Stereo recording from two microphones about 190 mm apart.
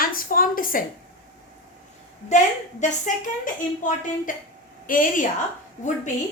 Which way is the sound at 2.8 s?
40° left (ahead or behind).